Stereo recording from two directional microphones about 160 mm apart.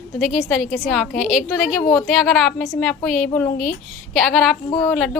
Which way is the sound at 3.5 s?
55° left (ahead or behind).